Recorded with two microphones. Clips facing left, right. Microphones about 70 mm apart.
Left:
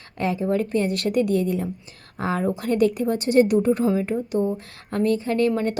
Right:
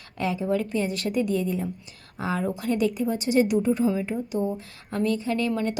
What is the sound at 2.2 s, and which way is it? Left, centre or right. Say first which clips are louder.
A woman's voice: left 3 dB; left.